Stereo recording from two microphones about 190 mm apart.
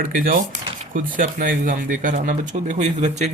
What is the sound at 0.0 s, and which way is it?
Speech, 45° right (ahead or behind).